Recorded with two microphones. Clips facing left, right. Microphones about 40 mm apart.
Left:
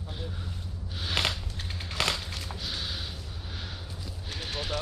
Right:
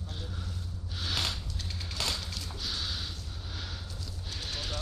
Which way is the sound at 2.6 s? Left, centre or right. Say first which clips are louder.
Even; centre.